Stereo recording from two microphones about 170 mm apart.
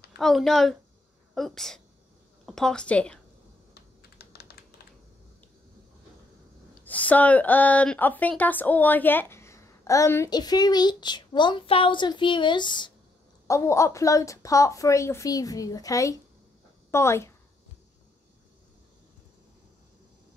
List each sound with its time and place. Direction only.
0.2 s a woman's voice: centre (ahead or behind)
3.7 s typing: 70° left (ahead or behind)
6.8 s a woman's voice: 10° left (ahead or behind); by 12.9 s 25° left (ahead or behind)
13.5 s a woman's voice: 15° left (ahead or behind)